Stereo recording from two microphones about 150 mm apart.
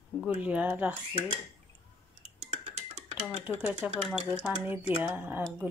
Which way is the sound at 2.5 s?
45° right (ahead or behind).